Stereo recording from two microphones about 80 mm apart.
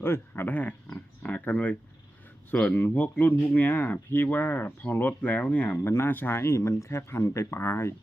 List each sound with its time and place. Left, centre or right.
0.0 s speech: left
0.5 s speech: centre